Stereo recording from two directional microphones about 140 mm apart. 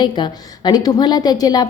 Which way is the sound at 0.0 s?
30° left (ahead or behind).